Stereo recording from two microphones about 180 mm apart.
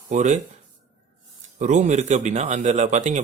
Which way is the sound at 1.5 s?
40° right (ahead or behind).